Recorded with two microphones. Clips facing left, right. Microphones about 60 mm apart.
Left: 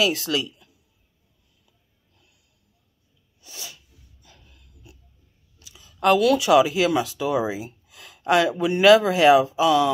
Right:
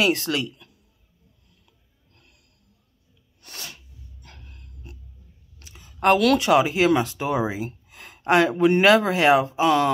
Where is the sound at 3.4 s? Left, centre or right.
Right.